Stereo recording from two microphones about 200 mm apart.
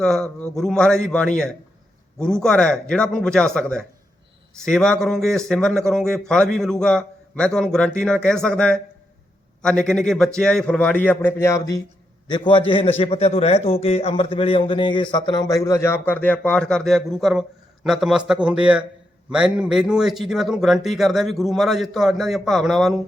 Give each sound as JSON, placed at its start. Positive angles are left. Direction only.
{"t": 0.0, "sound": "a man's voice", "side_deg": 5}